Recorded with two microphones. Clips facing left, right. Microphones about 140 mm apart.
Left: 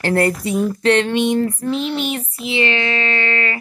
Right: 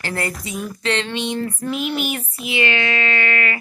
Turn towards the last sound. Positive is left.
turn(degrees=30)  # may be behind; listen again after turning